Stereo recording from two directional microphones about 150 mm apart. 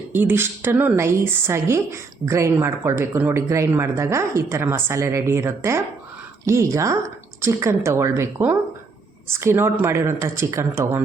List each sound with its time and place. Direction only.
0.1 s a woman's voice: 15° right (ahead or behind)